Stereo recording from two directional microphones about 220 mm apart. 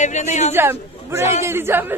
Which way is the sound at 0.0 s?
30° left (ahead or behind).